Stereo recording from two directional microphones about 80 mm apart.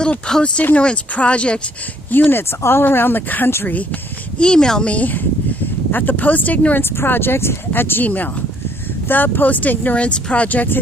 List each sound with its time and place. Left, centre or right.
0.0 s speech: centre
2.0 s speech: left
4.4 s speech: centre